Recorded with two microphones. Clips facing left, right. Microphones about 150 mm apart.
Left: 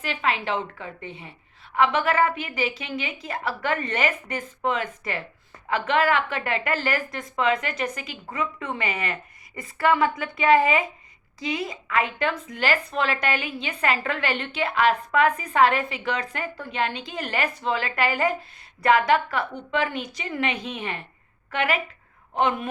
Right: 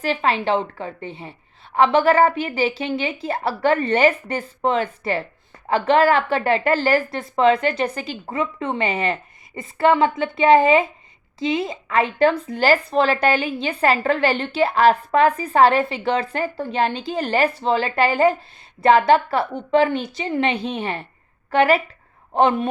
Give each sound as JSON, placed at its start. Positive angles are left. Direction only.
{"t": 0.0, "sound": "a woman's voice", "side_deg": -35}